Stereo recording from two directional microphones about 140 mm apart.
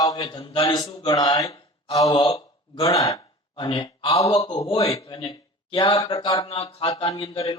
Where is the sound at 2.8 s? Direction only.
25° left (ahead or behind).